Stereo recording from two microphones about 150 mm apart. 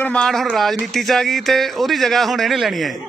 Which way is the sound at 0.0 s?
5° left (ahead or behind).